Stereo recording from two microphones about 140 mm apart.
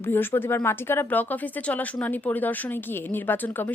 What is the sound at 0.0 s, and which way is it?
A woman's voice, 15° left (ahead or behind).